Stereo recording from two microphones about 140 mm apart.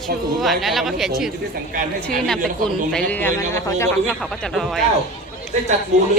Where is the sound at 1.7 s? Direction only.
70° right (ahead or behind).